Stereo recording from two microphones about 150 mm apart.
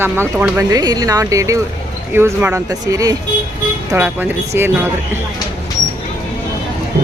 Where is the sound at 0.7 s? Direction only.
25° right (ahead or behind).